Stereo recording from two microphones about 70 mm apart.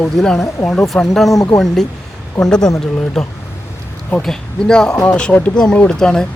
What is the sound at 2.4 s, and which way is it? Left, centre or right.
Speech, centre.